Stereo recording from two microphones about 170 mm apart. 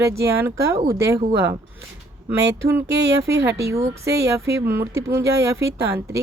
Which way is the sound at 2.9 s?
90° right.